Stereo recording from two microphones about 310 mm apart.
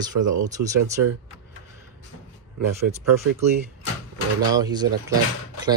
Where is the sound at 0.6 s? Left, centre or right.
Right.